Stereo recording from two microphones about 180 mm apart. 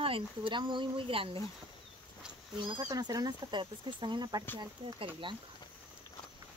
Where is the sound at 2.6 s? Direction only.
25° right (ahead or behind).